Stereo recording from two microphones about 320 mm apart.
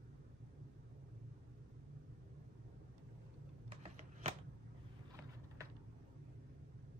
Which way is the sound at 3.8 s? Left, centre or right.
Right.